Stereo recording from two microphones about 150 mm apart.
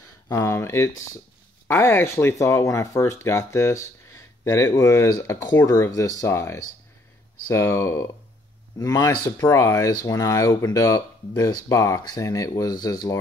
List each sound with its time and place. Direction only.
0.3 s speech: 20° left (ahead or behind)